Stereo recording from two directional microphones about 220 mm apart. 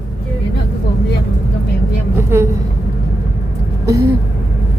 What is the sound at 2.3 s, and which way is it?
Vehicle, 10° right (ahead or behind).